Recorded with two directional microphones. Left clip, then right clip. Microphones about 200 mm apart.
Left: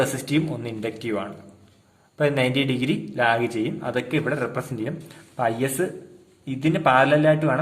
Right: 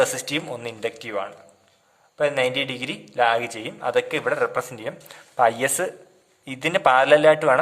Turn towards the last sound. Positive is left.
turn(degrees=-30)  # may be behind; listen again after turning